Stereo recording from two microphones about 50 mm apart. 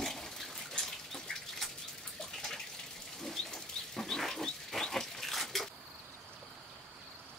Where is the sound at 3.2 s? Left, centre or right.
Centre.